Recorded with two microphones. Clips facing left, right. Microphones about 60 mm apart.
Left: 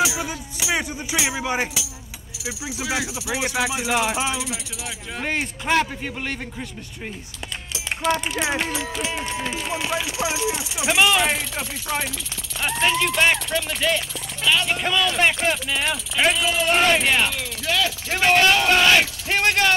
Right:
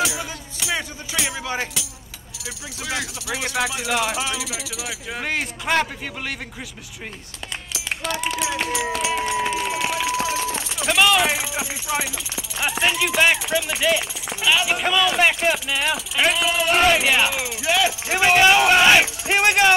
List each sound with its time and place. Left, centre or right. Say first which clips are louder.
0.0 s music: left 2 dB; centre
2.4 s speech: left 3 dB; centre
9.6 s speech: right 3 dB; centre
9.9 s speech: right 4 dB; right
10.2 s speech: even; centre